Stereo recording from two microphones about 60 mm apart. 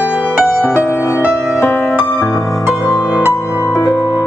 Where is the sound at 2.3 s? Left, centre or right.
Left.